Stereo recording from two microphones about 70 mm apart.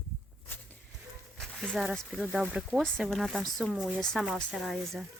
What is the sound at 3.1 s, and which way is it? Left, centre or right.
Speech, centre.